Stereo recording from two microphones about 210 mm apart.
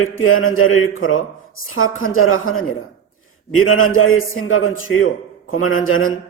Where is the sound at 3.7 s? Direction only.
75° left (ahead or behind).